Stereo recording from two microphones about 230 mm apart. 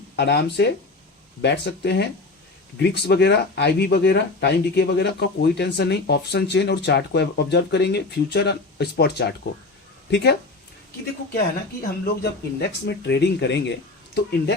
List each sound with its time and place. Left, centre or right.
0.2 s speech: left
12.2 s speech: left